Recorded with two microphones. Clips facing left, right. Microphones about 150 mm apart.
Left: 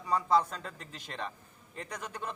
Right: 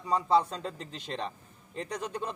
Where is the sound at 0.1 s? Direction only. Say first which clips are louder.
Right 2 dB; 30° right (ahead or behind).